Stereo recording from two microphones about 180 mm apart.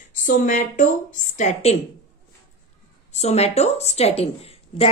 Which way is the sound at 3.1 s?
35° left (ahead or behind).